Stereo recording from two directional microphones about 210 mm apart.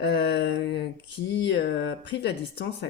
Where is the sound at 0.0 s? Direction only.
55° left (ahead or behind).